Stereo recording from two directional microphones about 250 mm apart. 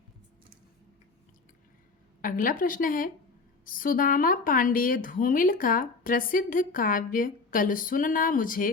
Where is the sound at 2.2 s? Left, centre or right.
Left.